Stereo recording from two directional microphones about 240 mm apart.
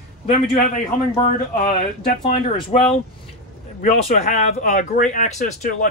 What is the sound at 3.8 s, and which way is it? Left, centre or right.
Speech, left.